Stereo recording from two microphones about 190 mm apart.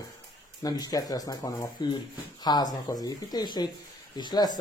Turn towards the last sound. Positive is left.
turn(degrees=20)  # may be behind; listen again after turning